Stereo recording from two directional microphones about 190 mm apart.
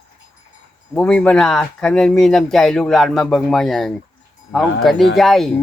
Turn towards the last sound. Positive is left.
turn(degrees=0)  # may be behind; listen again after turning